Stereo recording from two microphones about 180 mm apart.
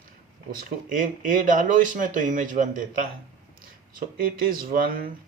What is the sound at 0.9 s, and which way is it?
Speech, 45° right (ahead or behind).